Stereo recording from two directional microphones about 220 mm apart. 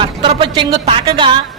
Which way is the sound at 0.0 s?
25° right (ahead or behind).